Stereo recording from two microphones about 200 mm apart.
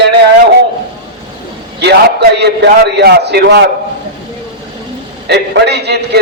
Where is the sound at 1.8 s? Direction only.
55° right (ahead or behind).